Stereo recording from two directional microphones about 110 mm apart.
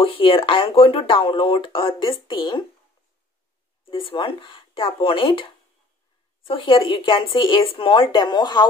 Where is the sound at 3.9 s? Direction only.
50° left (ahead or behind).